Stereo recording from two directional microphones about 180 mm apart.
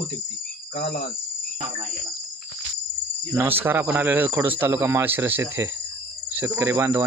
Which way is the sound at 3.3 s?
10° right (ahead or behind).